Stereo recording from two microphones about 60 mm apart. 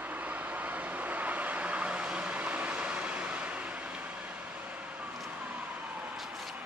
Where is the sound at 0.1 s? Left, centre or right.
Right.